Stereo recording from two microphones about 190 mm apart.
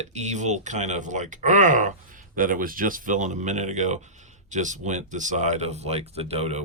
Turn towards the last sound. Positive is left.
turn(degrees=-35)  # may be behind; listen again after turning